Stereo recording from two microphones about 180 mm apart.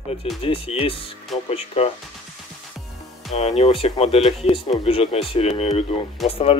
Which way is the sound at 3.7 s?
30° left (ahead or behind).